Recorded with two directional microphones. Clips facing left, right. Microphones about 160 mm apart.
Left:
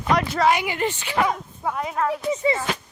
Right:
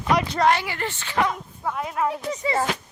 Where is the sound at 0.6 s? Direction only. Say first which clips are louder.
Left 4 dB; 15° left (ahead or behind); by 2.0 s centre (ahead or behind).